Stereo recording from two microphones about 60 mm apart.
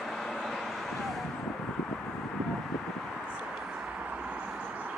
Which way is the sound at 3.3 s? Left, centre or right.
Centre.